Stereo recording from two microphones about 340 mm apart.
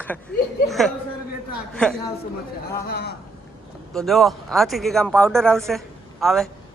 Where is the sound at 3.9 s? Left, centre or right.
Centre.